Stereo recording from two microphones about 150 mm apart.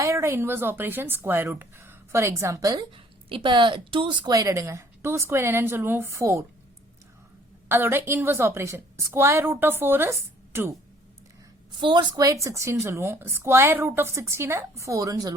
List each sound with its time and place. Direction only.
0.0 s a woman's voice: 20° right (ahead or behind)
7.7 s a woman's voice: 15° right (ahead or behind)
11.8 s a woman's voice: 30° right (ahead or behind)